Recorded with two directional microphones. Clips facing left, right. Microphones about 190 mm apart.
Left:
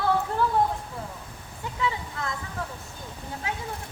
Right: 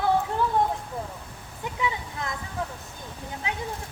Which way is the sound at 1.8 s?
20° right (ahead or behind).